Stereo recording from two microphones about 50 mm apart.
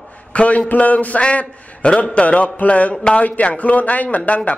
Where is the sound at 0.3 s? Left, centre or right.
Left.